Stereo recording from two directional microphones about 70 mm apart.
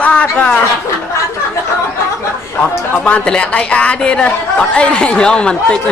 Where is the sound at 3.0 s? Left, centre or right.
Centre.